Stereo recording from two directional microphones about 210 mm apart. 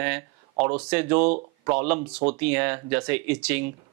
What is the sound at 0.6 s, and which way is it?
Speech, 5° right (ahead or behind).